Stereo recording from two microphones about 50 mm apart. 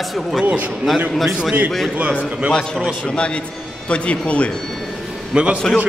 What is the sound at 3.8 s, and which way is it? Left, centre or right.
Speech, left.